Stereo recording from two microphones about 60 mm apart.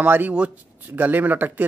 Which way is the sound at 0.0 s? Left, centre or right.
Right.